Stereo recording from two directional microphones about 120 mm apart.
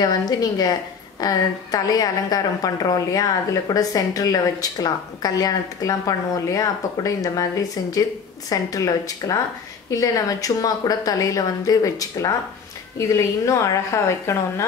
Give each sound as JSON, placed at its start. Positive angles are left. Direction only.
{"t": 0.0, "sound": "a woman's voice", "side_deg": 35}